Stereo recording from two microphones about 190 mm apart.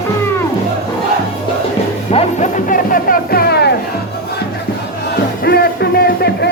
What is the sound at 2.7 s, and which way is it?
Music, 45° left (ahead or behind).